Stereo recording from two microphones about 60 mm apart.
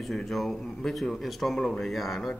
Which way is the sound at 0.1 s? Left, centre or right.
Centre.